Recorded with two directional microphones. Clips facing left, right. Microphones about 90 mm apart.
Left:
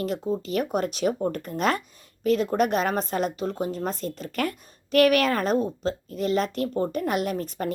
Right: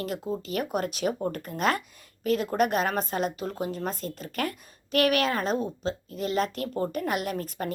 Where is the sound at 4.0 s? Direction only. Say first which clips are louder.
Left 4 dB; 40° right (ahead or behind).